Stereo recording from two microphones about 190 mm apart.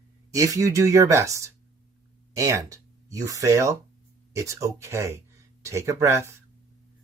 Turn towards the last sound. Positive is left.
turn(degrees=-15)  # may be behind; listen again after turning